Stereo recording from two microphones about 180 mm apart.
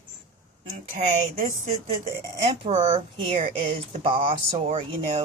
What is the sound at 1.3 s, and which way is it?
Speech, 35° right (ahead or behind).